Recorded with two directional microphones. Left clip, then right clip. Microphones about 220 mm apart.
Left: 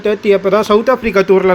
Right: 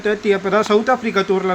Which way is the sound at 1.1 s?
20° left (ahead or behind).